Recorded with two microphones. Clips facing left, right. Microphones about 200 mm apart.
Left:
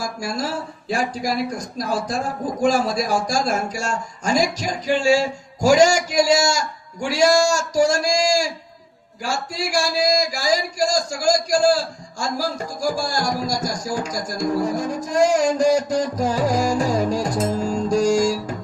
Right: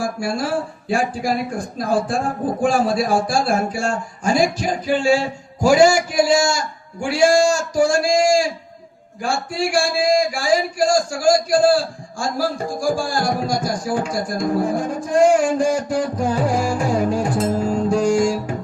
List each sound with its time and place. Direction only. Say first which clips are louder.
0.0 s speech: right 4 dB; 40° left (ahead or behind)
17.8 s music: even; 40° left (ahead or behind)